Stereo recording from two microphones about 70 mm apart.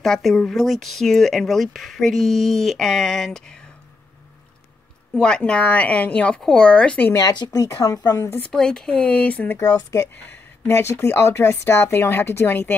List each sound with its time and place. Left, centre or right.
0.0 s speech: centre
5.1 s a woman's voice: centre
7.3 s speech: left
7.6 s speech: left
8.5 s a woman's voice: centre
9.5 s speech: left